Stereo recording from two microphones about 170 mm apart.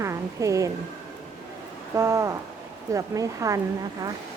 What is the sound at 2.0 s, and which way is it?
Speech, 15° right (ahead or behind).